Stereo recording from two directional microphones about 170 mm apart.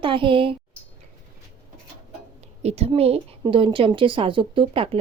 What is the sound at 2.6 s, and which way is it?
A woman's voice, 40° right (ahead or behind).